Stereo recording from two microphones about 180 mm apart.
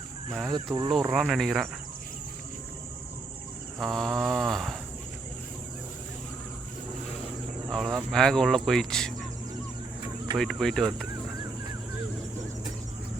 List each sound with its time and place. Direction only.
0.5 s speech: 20° right (ahead or behind)
0.9 s speech: centre (ahead or behind)
3.8 s speech: centre (ahead or behind)
7.7 s speech: centre (ahead or behind)
10.3 s speech: centre (ahead or behind)